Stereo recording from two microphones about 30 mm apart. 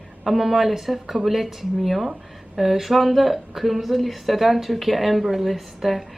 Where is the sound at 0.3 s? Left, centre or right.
Centre.